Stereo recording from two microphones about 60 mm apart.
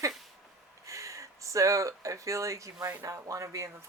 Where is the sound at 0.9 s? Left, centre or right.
Right.